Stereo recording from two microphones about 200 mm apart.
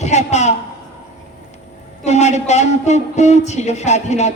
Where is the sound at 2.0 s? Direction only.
35° left (ahead or behind).